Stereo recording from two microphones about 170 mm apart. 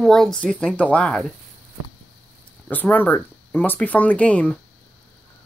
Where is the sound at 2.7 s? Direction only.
10° left (ahead or behind).